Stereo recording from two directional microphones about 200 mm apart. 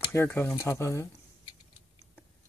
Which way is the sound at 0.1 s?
10° left (ahead or behind).